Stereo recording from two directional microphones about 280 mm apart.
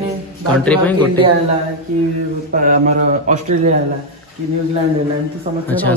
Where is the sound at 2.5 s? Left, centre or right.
Right.